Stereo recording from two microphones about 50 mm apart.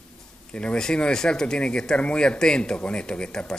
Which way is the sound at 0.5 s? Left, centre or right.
Left.